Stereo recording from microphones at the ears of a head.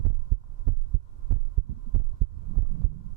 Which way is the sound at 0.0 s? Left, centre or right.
Right.